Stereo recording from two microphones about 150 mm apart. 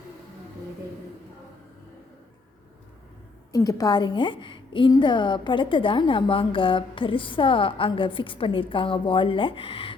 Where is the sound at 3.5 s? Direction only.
25° left (ahead or behind).